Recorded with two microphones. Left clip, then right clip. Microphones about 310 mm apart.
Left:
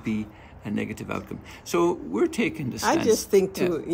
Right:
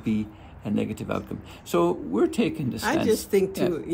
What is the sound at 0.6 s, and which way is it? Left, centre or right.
Speech, centre.